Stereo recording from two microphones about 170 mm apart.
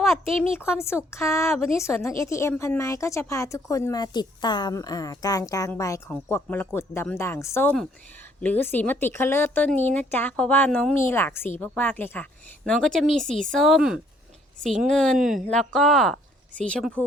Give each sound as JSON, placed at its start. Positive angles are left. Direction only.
{"t": 1.1, "sound": "speech", "side_deg": 15}
{"t": 1.5, "sound": "a woman's voice", "side_deg": 5}
{"t": 1.7, "sound": "a woman's voice", "side_deg": 15}
{"t": 10.9, "sound": "a woman's voice", "side_deg": 15}